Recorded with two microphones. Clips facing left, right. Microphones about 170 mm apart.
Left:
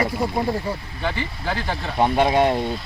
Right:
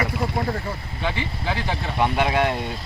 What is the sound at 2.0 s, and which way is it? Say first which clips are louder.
Speech: left 4 dB; 30° left (ahead or behind).